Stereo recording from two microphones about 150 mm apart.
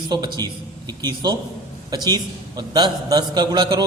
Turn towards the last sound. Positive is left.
turn(degrees=-30)  # may be behind; listen again after turning